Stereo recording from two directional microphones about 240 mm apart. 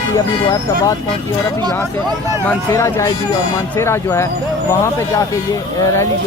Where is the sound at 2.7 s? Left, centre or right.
Centre.